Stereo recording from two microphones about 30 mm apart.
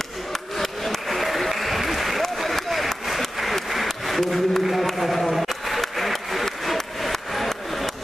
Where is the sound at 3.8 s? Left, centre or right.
Centre.